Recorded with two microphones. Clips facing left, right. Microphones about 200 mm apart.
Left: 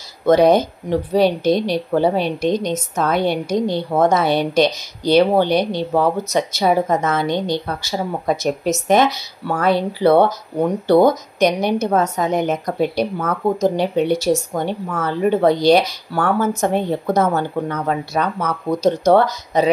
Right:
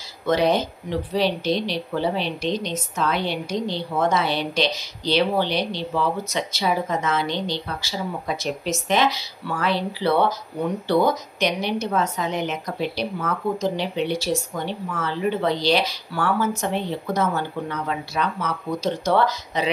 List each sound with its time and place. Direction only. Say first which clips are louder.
0.2 s speech: left 7 dB; 45° left (ahead or behind)